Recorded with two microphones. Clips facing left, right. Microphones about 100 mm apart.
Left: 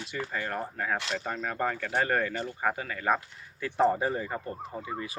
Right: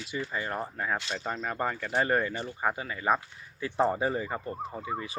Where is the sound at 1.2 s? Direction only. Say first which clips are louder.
Even; 15° right (ahead or behind).